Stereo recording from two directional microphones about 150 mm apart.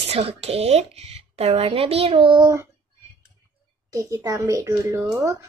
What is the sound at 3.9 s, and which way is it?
A child's voice, 25° right (ahead or behind).